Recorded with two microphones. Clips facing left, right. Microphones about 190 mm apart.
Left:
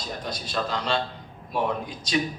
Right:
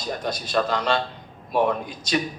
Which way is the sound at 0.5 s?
60° right (ahead or behind).